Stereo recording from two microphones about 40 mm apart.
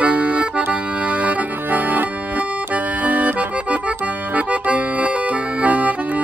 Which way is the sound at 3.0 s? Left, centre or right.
Right.